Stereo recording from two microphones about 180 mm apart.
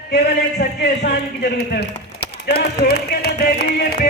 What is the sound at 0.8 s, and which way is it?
A man's voice, 65° left (ahead or behind).